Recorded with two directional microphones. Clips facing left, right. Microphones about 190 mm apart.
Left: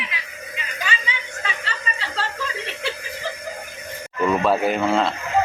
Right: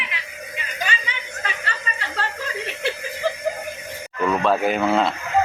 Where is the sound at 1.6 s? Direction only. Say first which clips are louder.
Even; 55° right (ahead or behind).